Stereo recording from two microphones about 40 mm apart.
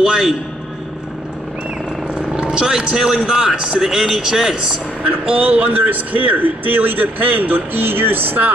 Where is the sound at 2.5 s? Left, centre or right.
Centre.